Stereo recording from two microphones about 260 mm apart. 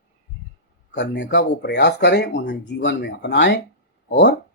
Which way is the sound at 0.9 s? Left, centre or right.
Left.